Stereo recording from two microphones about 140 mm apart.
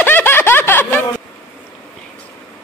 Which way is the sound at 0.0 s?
15° left (ahead or behind).